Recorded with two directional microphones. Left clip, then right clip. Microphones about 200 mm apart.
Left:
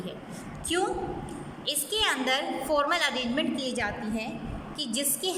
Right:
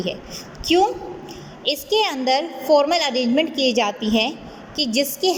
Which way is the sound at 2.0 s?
20° right (ahead or behind).